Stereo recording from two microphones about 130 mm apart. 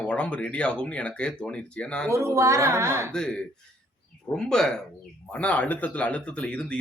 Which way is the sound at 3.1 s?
5° left (ahead or behind).